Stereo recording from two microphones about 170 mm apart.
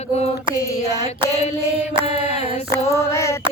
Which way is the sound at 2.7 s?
15° left (ahead or behind).